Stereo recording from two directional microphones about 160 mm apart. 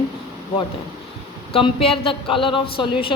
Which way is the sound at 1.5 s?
35° left (ahead or behind).